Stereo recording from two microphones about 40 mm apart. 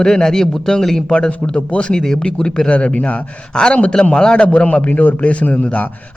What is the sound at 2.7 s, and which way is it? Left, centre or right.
Speech, left.